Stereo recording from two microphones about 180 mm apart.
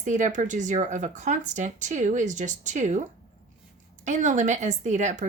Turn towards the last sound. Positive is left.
turn(degrees=-40)  # may be behind; listen again after turning